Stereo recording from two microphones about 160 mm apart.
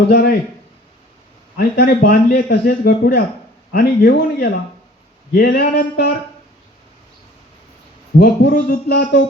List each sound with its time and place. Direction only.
0.1 s a man's voice: 80° left
1.5 s a man's voice: 70° left (ahead or behind); by 3.2 s 90° left
3.7 s speech: 65° left (ahead or behind)
5.7 s speech: 90° left
8.2 s speech: 90° left